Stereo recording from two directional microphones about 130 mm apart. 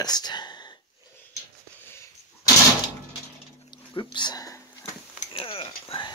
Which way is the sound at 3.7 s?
40° left (ahead or behind).